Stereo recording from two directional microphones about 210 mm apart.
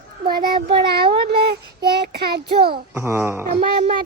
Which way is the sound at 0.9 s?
50° right (ahead or behind).